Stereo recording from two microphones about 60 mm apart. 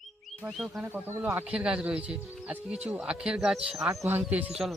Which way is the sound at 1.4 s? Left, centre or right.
Centre.